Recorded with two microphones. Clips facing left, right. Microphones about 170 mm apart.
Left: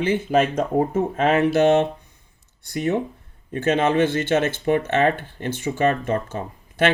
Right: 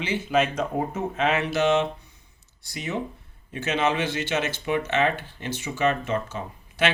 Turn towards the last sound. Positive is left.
turn(degrees=55)  # may be behind; listen again after turning